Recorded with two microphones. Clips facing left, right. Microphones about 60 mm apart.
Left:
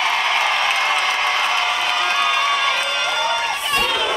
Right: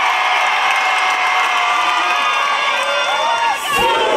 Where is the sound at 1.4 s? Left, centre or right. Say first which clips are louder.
Right 5 dB; centre.